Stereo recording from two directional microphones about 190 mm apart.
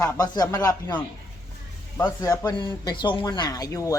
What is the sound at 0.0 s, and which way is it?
Speech, 15° left (ahead or behind).